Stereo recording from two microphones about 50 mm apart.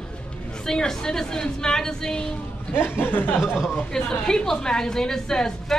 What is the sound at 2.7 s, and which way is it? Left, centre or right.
Speech, left.